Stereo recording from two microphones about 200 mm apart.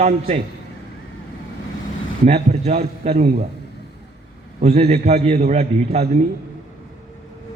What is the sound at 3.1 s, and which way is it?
Speech, 50° right (ahead or behind).